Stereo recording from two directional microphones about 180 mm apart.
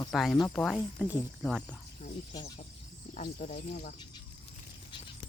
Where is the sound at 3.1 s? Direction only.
45° left (ahead or behind).